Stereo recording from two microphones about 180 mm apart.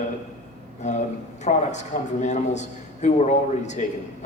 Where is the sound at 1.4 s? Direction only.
40° left (ahead or behind).